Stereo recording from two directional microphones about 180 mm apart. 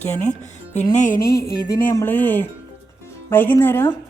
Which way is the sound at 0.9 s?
45° left (ahead or behind).